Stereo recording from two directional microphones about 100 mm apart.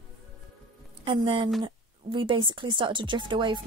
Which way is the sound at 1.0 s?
55° right (ahead or behind).